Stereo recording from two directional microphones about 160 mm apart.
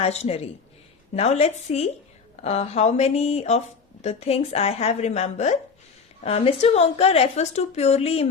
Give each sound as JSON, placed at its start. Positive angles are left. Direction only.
{"t": 0.0, "sound": "a woman's voice", "side_deg": 40}